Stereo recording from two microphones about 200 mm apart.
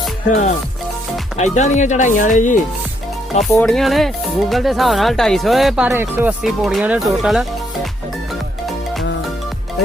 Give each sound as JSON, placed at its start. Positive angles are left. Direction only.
{"t": 0.3, "sound": "speech", "side_deg": 35}
{"t": 3.5, "sound": "speech", "side_deg": 5}